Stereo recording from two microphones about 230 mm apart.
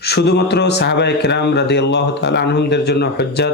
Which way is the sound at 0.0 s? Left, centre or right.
Left.